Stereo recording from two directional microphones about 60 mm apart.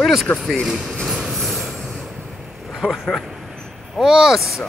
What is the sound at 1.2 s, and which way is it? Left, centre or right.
Train, centre.